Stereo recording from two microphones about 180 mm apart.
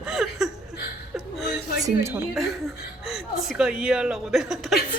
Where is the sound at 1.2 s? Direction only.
Centre (ahead or behind).